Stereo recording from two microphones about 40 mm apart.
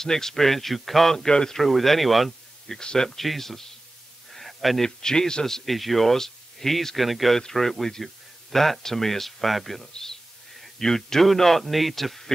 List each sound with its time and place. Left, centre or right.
0.0 s a man's voice: centre
1.7 s speech: centre
2.8 s speech: centre
3.1 s a man's voice: centre
4.3 s a sound: centre
4.8 s a man's voice: centre
5.7 s speech: centre
7.3 s a man's voice: centre
10.5 s a sound: centre
10.9 s speech: centre